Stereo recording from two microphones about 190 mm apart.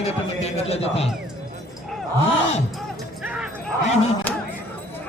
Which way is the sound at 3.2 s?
5° right (ahead or behind).